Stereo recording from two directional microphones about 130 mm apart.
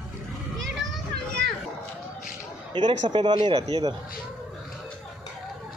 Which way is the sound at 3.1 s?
35° right (ahead or behind).